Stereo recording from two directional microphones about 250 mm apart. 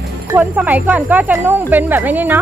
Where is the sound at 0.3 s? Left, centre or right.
Centre.